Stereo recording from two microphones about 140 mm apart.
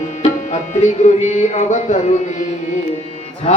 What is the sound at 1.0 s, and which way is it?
Music, 60° left (ahead or behind).